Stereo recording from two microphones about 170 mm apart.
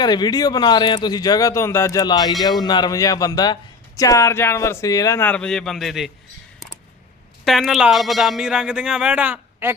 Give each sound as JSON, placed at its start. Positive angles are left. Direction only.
{"t": 0.0, "sound": "speech", "side_deg": 25}
{"t": 7.4, "sound": "speech", "side_deg": 0}